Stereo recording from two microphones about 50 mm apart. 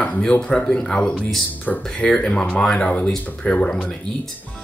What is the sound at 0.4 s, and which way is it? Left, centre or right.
Speech, centre.